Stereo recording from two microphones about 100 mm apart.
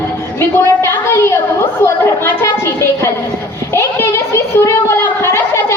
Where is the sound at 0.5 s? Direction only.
25° left (ahead or behind).